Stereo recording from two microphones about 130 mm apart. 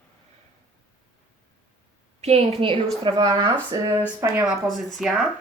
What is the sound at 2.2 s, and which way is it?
Speech, 55° right (ahead or behind).